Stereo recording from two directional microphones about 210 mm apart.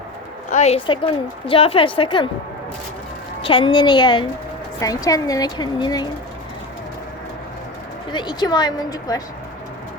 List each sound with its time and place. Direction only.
0.5 s a woman's voice: 30° left (ahead or behind)
3.4 s a woman's voice: 25° left (ahead or behind)
8.1 s a woman's voice: 20° left (ahead or behind)